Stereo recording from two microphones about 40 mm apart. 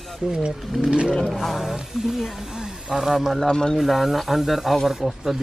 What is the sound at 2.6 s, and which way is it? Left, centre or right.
Speech, centre.